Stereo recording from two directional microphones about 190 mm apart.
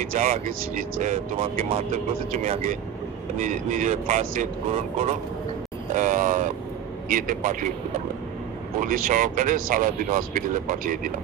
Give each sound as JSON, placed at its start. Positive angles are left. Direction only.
{"t": 0.0, "sound": "speech", "side_deg": -45}
{"t": 8.7, "sound": "speech", "side_deg": -45}